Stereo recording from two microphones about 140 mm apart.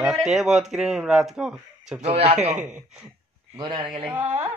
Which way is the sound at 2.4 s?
10° right (ahead or behind).